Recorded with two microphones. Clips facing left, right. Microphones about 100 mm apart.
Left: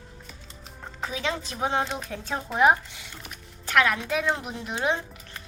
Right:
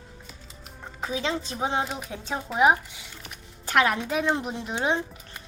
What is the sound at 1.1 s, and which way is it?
A woman's voice, 25° right (ahead or behind).